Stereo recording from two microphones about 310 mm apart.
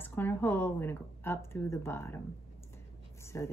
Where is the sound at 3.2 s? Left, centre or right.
Centre.